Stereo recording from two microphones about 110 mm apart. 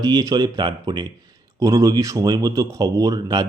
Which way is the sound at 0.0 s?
35° right (ahead or behind).